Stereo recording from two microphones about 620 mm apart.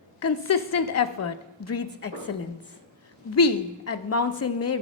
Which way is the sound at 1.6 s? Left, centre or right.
Left.